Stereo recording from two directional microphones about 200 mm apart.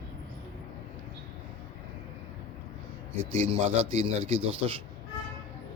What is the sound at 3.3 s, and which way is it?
Speech, 30° right (ahead or behind).